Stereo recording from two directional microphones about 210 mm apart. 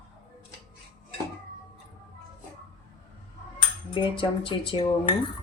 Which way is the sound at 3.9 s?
25° left (ahead or behind).